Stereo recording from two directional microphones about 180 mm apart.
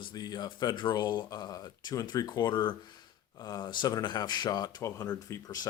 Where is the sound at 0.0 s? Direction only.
20° left (ahead or behind).